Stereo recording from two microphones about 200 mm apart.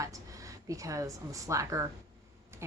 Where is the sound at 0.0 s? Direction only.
15° right (ahead or behind).